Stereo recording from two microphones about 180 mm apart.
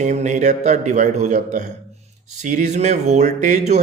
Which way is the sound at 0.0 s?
40° right (ahead or behind).